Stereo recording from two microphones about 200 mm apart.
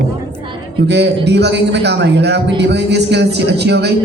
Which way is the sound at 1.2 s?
60° right (ahead or behind).